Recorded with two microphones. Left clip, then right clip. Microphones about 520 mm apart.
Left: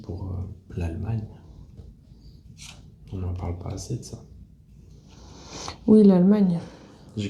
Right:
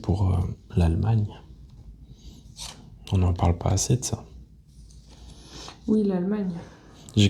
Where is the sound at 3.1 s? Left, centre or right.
Right.